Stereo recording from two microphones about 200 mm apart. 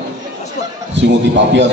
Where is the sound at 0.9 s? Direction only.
65° right (ahead or behind).